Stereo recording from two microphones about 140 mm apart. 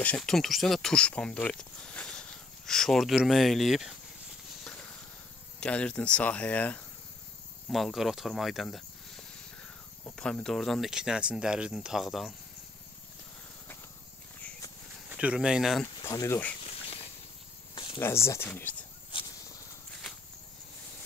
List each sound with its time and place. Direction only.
0.0 s speech: 5° left (ahead or behind)
5.6 s speech: 10° left (ahead or behind)
7.7 s speech: centre (ahead or behind)
15.0 s speech: 10° right (ahead or behind)
16.0 s speech: 25° left (ahead or behind)
17.9 s speech: 20° left (ahead or behind)
19.1 s a sound: 40° left (ahead or behind)